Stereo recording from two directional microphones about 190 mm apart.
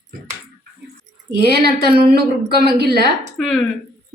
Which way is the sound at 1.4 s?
55° right (ahead or behind).